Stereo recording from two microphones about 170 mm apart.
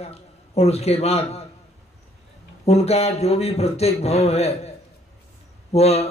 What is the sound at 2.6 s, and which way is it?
A man's voice, 40° left (ahead or behind).